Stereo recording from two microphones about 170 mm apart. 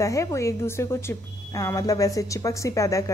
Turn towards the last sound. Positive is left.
turn(degrees=20)  # may be behind; listen again after turning